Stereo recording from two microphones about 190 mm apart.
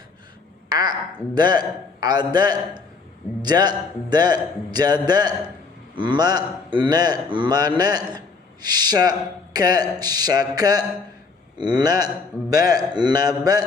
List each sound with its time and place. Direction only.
0.7 s a woman's voice: 20° right (ahead or behind)